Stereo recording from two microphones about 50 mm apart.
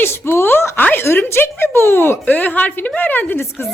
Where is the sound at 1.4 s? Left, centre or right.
Left.